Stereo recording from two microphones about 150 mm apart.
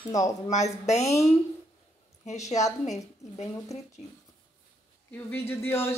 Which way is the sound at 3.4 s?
45° left (ahead or behind).